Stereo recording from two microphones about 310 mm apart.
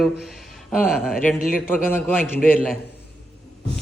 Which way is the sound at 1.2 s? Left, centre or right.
Left.